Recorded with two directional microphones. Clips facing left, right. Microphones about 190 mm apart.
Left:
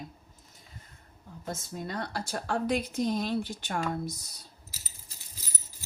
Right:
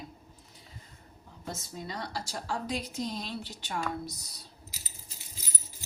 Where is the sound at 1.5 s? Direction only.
55° left (ahead or behind).